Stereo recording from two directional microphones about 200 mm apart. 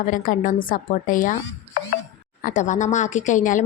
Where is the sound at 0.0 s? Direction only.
40° left (ahead or behind).